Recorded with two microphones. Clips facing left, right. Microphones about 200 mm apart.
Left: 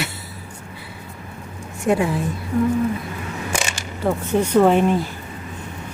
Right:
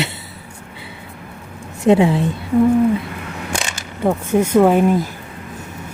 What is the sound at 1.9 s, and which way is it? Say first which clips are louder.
Speech: right 6 dB; 25° right (ahead or behind).